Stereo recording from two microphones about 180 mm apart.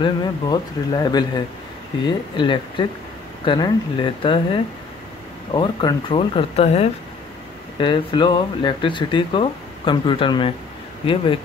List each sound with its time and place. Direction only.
0.0 s speech: 25° left (ahead or behind)
5.5 s speech: 25° left (ahead or behind)